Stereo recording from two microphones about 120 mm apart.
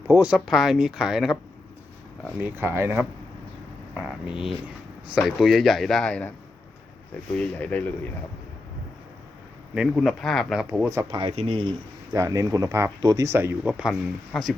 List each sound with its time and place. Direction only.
0.1 s speech: 10° right (ahead or behind)
2.4 s speech: 20° right (ahead or behind)
3.9 s speech: 10° right (ahead or behind); by 6.3 s 10° left (ahead or behind)
7.3 s speech: 10° left (ahead or behind)
9.9 s speech: centre (ahead or behind)
11.1 s speech: 45° right (ahead or behind)
12.1 s speech: 25° right (ahead or behind); by 14.5 s centre (ahead or behind)